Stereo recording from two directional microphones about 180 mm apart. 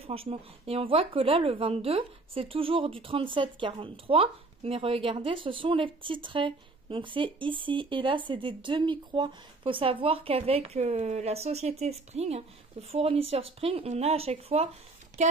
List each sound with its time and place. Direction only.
0.0 s speech: 30° right (ahead or behind)